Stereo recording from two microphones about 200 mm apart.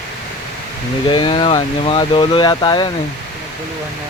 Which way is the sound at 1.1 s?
25° left (ahead or behind).